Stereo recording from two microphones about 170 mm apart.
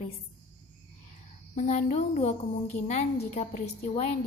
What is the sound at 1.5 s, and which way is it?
A woman's voice, 45° left (ahead or behind).